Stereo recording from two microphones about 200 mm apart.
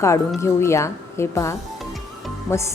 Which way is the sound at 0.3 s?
15° left (ahead or behind).